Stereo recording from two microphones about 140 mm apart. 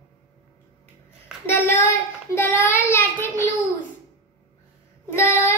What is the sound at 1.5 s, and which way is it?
Child singing, 15° left (ahead or behind).